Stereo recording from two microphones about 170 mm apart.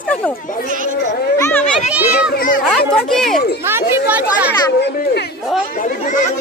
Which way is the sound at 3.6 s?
15° right (ahead or behind).